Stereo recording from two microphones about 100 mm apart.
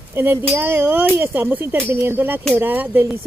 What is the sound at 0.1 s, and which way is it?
Speech, 20° right (ahead or behind).